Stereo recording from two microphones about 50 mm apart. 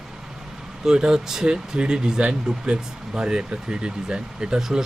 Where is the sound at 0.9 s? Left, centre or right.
Centre.